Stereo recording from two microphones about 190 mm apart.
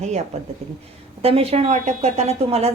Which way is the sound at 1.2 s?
30° right (ahead or behind).